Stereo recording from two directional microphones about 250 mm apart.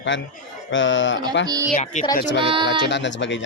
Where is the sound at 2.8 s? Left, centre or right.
Left.